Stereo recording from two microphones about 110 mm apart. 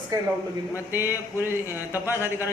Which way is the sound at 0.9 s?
20° right (ahead or behind).